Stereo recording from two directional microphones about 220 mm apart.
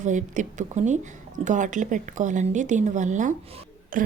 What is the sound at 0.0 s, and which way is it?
A woman's voice, 35° right (ahead or behind).